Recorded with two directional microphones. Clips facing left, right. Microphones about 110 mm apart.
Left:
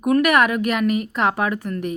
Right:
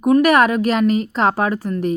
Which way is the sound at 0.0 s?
30° right (ahead or behind).